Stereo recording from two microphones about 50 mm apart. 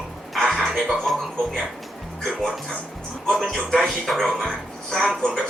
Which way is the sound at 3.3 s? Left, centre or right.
Centre.